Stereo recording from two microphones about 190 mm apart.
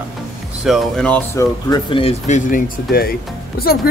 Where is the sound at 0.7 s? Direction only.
Centre (ahead or behind).